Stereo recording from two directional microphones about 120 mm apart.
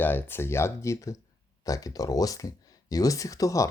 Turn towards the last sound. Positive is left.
turn(degrees=25)  # may be behind; listen again after turning